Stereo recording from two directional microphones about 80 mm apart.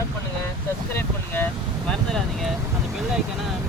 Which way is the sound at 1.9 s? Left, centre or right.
Centre.